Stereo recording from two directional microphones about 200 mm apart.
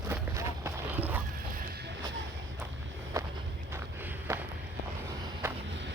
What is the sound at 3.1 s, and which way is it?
Walk, 15° right (ahead or behind).